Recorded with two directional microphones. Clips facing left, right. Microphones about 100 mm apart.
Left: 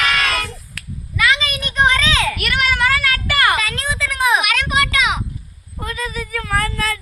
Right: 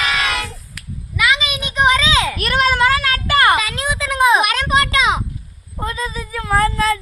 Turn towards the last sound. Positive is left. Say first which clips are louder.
# right 5 dB
turn(degrees=-25)  # may be behind; listen again after turning